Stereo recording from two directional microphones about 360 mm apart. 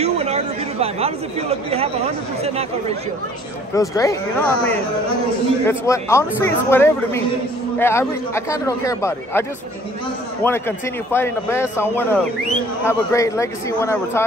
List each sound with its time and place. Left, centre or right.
0.0 s speech: centre
3.7 s a man's voice: centre
11.1 s a man's voice: centre